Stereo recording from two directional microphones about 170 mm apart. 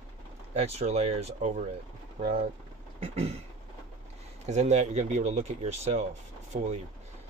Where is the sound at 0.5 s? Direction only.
40° right (ahead or behind).